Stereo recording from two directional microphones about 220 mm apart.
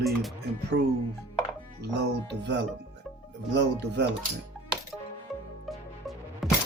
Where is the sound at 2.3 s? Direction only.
50° right (ahead or behind).